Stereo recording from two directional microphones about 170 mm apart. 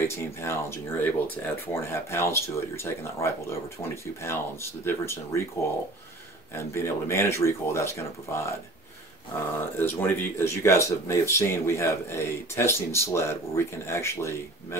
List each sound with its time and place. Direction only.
0.1 s speech: 15° left (ahead or behind)
6.5 s speech: 15° left (ahead or behind)
9.6 s speech: 15° left (ahead or behind)